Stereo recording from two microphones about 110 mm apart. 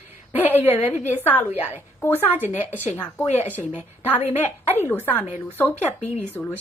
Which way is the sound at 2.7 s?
15° left (ahead or behind).